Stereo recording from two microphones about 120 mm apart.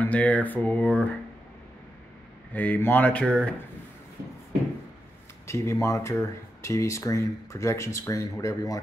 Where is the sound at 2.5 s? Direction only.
15° left (ahead or behind).